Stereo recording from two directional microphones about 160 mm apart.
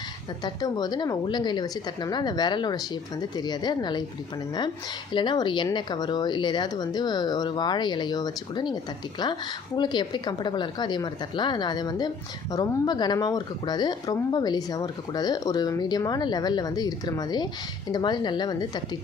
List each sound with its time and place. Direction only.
0.4 s speech: 25° left (ahead or behind)
5.1 s speech: 30° left (ahead or behind)